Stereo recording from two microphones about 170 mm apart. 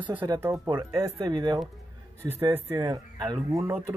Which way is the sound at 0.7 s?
25° right (ahead or behind).